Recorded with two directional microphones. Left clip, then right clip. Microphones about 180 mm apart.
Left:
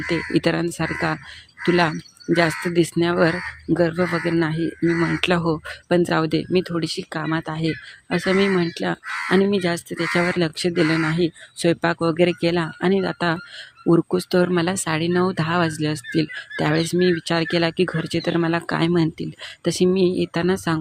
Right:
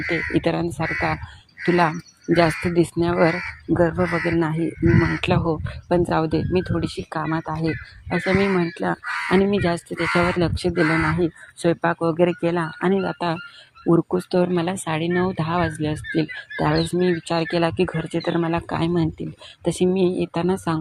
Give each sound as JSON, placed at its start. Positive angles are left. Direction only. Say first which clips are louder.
{"t": 0.1, "sound": "speech", "louder": "left 1 dB", "side_deg": 25}
{"t": 2.3, "sound": "speech", "louder": "right 1 dB", "side_deg": 5}
{"t": 4.9, "sound": "speech", "louder": "left 1 dB", "side_deg": 35}